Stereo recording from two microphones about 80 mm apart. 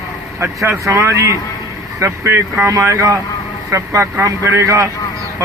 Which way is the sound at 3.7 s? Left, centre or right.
Right.